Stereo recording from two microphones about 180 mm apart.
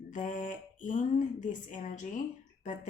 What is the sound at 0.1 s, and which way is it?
Speech, 45° left (ahead or behind).